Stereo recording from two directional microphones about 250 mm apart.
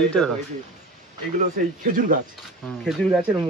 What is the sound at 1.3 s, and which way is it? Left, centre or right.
Speech, right.